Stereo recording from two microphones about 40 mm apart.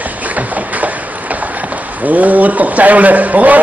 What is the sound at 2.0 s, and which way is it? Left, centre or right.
A man's voice, right.